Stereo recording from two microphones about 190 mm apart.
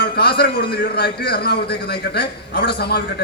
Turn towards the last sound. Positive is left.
turn(degrees=60)  # may be behind; listen again after turning